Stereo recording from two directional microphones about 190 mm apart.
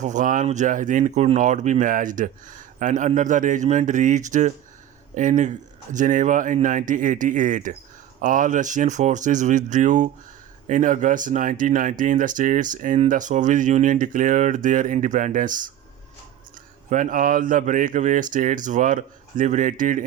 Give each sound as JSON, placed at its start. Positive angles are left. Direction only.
{"t": 0.0, "sound": "speech", "side_deg": -40}
{"t": 16.9, "sound": "speech", "side_deg": -45}